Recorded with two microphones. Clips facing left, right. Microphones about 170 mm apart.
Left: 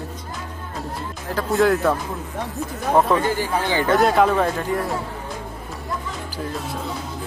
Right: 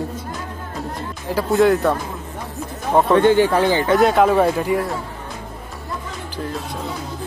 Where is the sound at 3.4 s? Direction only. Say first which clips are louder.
Right 8 dB; 70° right (ahead or behind).